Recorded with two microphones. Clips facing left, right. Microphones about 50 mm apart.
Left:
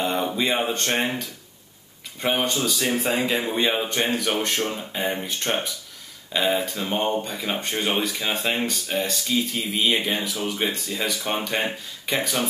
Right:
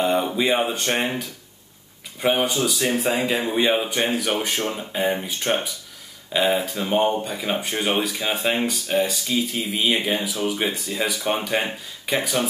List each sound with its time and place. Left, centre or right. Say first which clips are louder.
0.0 s speech: right 3 dB; centre